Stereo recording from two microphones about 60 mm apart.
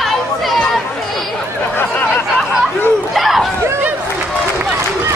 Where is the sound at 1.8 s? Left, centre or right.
Left.